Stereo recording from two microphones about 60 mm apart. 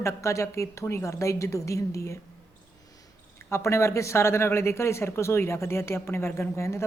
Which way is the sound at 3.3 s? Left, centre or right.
Left.